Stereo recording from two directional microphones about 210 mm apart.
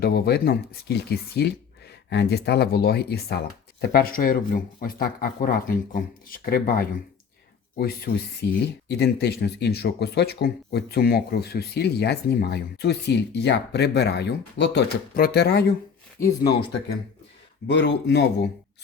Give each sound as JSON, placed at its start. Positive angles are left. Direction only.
{"t": 0.0, "sound": "speech", "side_deg": 50}
{"t": 17.7, "sound": "speech", "side_deg": 55}